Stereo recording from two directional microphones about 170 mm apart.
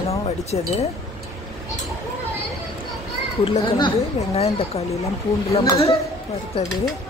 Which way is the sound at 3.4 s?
30° left (ahead or behind).